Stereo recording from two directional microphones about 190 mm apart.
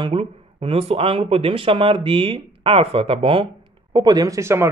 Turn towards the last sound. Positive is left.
turn(degrees=-15)  # may be behind; listen again after turning